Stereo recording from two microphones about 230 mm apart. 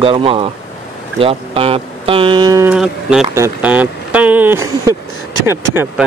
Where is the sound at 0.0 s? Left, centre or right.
Right.